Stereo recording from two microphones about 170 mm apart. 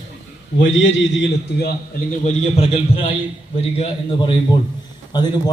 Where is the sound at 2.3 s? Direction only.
40° left (ahead or behind).